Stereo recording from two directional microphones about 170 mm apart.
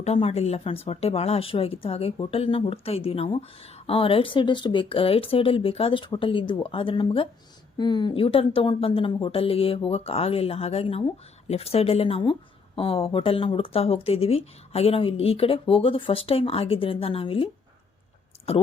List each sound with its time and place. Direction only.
0.0 s a woman's voice: 40° left (ahead or behind)